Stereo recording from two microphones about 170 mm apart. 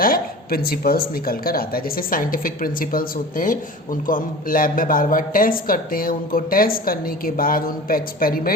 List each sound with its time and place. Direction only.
0.0 s a woman's voice: 60° left (ahead or behind)